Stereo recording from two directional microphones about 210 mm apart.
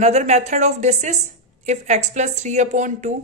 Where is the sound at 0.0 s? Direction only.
30° right (ahead or behind).